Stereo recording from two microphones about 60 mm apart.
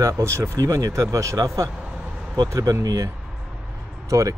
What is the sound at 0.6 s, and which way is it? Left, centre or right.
Speech, right.